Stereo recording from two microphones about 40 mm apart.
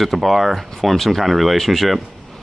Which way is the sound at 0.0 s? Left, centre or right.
Centre.